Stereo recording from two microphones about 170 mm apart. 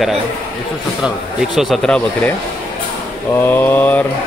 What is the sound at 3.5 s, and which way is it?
Speech, 10° left (ahead or behind).